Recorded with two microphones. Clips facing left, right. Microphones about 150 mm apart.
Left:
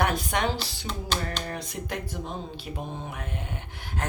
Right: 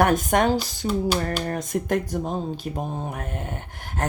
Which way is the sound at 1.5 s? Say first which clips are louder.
Right 9 dB; 45° right (ahead or behind).